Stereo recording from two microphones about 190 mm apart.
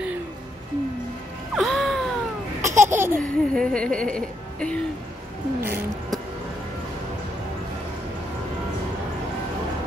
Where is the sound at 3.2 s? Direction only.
5° left (ahead or behind).